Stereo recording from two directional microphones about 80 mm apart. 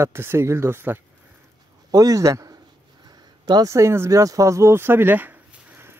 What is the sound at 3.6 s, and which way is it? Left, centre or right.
Speech, right.